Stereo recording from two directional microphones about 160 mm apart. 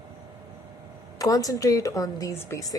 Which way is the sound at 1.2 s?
20° left (ahead or behind).